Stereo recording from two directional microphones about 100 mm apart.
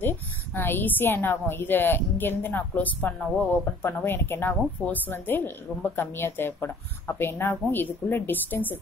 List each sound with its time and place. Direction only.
0.6 s a woman's voice: 20° left (ahead or behind)